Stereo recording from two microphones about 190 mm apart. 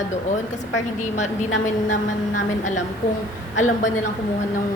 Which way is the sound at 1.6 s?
40° left (ahead or behind).